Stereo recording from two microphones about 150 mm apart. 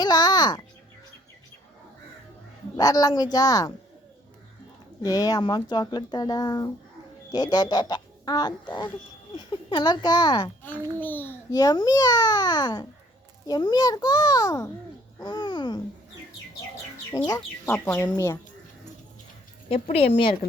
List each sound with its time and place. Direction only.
0.0 s a sound: 25° left (ahead or behind)
2.7 s speech: 25° left (ahead or behind)
5.0 s speech: 25° left (ahead or behind)
10.9 s speech: 10° left (ahead or behind)
11.5 s speech: 25° left (ahead or behind)
17.1 s speech: 20° left (ahead or behind)
19.7 s speech: 40° left (ahead or behind)